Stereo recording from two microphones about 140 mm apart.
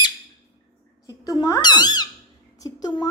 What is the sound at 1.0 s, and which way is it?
Speech, 25° left (ahead or behind).